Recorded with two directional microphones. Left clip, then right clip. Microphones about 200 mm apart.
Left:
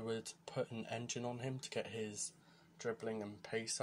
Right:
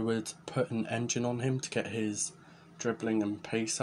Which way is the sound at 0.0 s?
25° left (ahead or behind).